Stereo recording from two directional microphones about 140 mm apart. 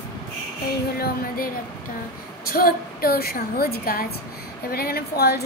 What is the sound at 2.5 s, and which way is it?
A woman's voice, 90° left.